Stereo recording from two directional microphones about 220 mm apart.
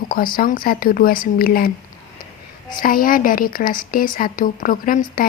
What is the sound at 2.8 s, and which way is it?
A woman's voice, 40° left (ahead or behind).